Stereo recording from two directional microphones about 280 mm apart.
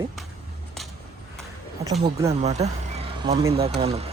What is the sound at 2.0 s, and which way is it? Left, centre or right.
Speech, centre.